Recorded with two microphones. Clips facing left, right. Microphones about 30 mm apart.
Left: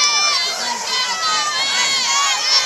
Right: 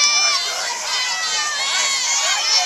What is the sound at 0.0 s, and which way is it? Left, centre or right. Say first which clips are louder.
Run: left 1 dB; centre.